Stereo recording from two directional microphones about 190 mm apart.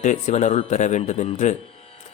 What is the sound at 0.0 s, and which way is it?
A man's voice, 40° left (ahead or behind).